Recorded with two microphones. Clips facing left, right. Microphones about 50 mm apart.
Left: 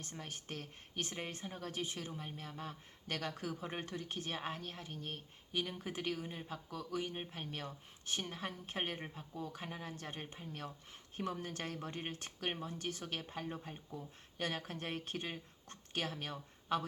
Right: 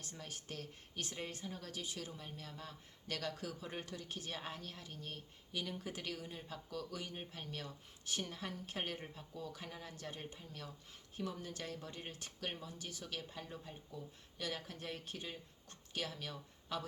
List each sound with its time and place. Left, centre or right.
0.0 s a woman's voice: left